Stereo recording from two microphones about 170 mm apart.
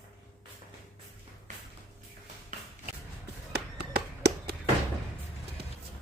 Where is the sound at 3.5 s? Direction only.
75° right (ahead or behind).